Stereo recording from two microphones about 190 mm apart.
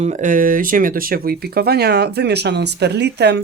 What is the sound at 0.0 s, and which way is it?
Speech, 40° right (ahead or behind).